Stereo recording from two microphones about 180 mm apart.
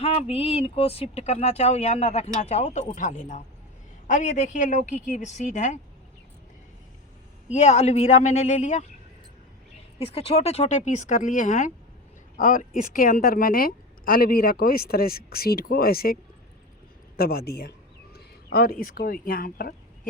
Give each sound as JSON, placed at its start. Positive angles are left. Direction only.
{"t": 0.0, "sound": "a woman's voice", "side_deg": 35}
{"t": 7.5, "sound": "speech", "side_deg": 40}
{"t": 10.0, "sound": "a woman's voice", "side_deg": 35}
{"t": 17.2, "sound": "speech", "side_deg": 60}